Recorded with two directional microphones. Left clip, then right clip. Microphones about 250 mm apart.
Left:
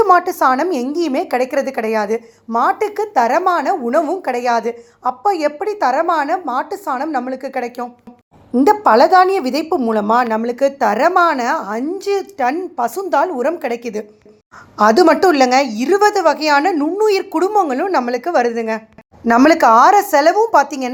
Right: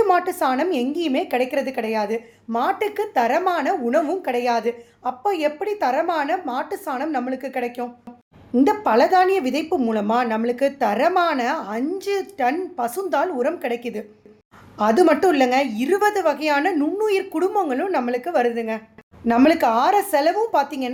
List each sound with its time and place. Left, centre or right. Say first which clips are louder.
0.0 s a woman's voice: left 7 dB; centre